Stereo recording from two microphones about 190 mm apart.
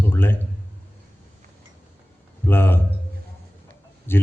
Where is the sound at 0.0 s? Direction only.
10° left (ahead or behind).